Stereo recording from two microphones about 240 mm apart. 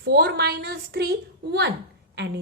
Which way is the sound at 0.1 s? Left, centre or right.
Right.